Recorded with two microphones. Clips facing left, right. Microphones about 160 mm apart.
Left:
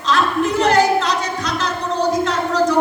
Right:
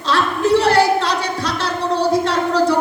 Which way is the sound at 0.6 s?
35° right (ahead or behind).